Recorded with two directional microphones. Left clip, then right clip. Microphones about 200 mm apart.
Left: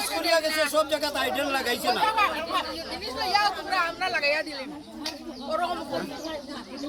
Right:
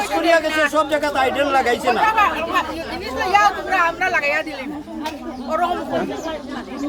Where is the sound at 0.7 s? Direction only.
55° left (ahead or behind).